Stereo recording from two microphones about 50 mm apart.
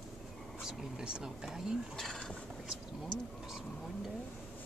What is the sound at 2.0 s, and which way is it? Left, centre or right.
Speech, centre.